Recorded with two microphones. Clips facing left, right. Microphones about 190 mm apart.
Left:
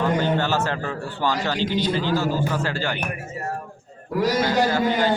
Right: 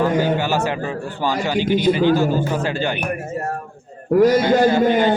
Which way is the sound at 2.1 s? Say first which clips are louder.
Right 4 dB; 15° right (ahead or behind).